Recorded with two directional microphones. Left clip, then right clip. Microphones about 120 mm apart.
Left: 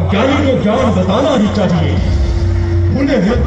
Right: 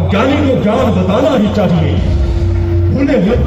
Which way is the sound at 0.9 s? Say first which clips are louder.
Right 1 dB; 35° right (ahead or behind).